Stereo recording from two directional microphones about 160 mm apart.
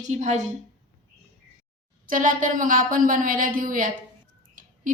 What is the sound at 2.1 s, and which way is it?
Speech, 60° right (ahead or behind).